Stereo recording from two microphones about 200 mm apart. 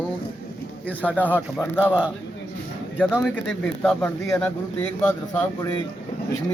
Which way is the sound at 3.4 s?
Centre (ahead or behind).